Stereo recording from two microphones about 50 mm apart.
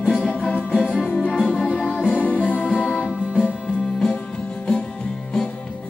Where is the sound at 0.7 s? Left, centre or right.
Centre.